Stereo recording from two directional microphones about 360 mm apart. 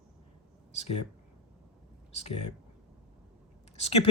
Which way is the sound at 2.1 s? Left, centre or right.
Centre.